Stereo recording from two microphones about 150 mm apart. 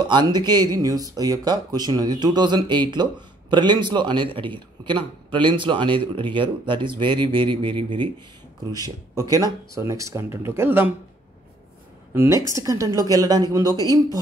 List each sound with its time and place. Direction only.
0.1 s speech: 30° right (ahead or behind)
12.1 s speech: 15° right (ahead or behind)